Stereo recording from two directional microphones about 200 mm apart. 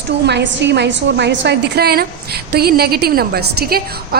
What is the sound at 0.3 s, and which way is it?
A woman's voice, 60° right (ahead or behind).